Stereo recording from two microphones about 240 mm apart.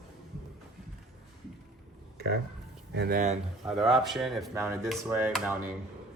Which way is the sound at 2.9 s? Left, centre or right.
Right.